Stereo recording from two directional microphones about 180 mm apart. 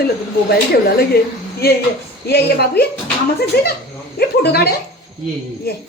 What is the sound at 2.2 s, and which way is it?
Speech, 65° left (ahead or behind).